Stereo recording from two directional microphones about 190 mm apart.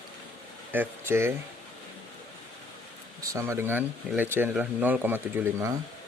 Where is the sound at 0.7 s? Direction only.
10° right (ahead or behind).